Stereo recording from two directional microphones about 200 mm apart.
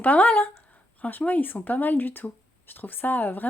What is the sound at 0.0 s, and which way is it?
Speech, 10° left (ahead or behind).